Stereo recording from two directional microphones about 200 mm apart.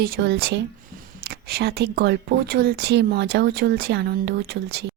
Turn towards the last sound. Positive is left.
turn(degrees=-55)  # may be behind; listen again after turning